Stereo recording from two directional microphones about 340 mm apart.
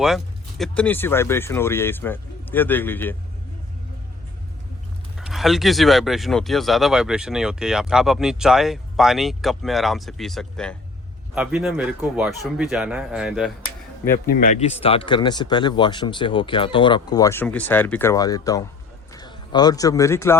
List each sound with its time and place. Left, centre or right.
0.6 s speech: centre
5.1 s speech: centre
14.3 s speech: left; by 20.3 s centre